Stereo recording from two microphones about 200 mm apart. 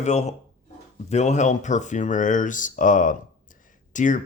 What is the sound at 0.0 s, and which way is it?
Speech, 35° left (ahead or behind).